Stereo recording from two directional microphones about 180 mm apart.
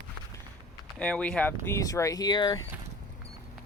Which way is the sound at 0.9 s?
5° left (ahead or behind).